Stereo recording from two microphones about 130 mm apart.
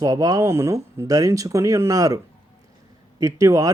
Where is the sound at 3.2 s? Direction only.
25° right (ahead or behind).